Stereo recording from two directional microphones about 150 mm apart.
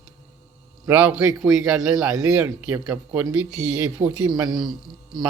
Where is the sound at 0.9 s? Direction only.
10° right (ahead or behind).